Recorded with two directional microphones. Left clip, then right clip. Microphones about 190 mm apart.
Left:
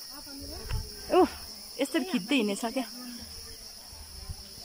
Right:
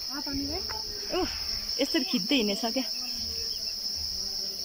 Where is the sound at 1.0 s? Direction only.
20° left (ahead or behind).